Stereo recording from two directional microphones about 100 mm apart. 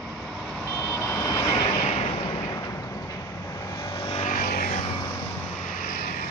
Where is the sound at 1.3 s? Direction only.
40° left (ahead or behind).